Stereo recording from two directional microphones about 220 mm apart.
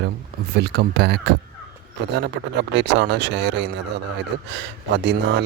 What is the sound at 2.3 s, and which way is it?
Speech, 50° right (ahead or behind).